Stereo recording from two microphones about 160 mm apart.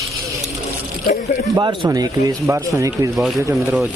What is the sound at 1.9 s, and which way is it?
Speech, 20° right (ahead or behind).